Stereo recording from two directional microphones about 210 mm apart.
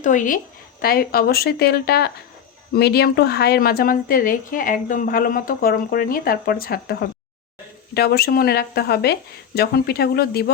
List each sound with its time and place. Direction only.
0.0 s a woman's voice: 35° left (ahead or behind)